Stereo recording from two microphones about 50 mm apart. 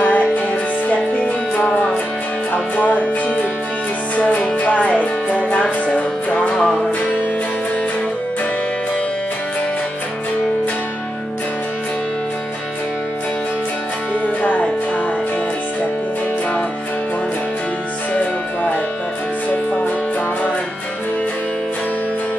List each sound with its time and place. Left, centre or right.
0.0 s music: left
1.7 s music: centre
2.5 s music: left
14.4 s music: left
18.1 s music: left